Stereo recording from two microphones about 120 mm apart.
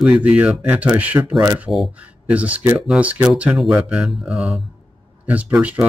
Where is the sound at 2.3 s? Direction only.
15° right (ahead or behind).